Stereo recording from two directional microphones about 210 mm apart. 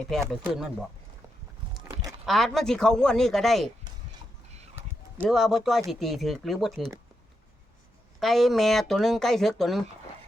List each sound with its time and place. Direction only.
0.1 s speech: centre (ahead or behind)
1.7 s livestock: 15° right (ahead or behind)
2.2 s speech: centre (ahead or behind)
4.7 s a sound: 10° right (ahead or behind)
5.9 s speech: centre (ahead or behind)
8.2 s speech: centre (ahead or behind)